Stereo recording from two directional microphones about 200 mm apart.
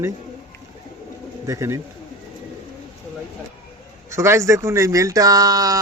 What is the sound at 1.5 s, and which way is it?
Speech, 15° right (ahead or behind).